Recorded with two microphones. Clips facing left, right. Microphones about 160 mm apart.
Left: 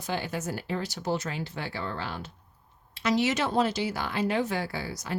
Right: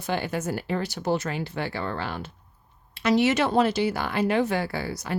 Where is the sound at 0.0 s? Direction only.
60° right (ahead or behind).